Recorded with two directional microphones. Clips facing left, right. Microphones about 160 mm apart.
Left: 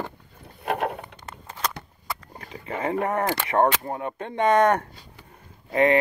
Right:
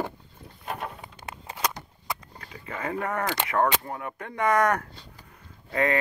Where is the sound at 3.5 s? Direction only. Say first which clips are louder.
Left 4 dB; 30° left (ahead or behind).